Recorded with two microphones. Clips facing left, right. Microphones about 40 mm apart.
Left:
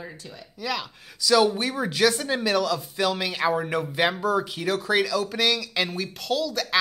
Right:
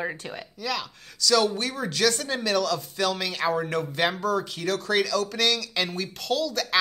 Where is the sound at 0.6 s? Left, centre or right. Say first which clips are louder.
Left 1 dB; centre.